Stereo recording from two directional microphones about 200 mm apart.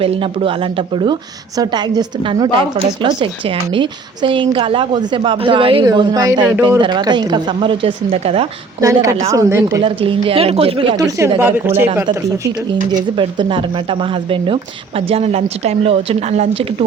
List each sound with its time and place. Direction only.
0.0 s a woman's voice: 25° right (ahead or behind)
8.8 s speech: 15° right (ahead or behind)
9.8 s a woman's voice: 25° right (ahead or behind)
11.3 s speech: 10° right (ahead or behind)
13.1 s a woman's voice: 25° right (ahead or behind)